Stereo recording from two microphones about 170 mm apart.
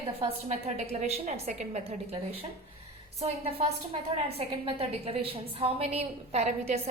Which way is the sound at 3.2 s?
35° right (ahead or behind).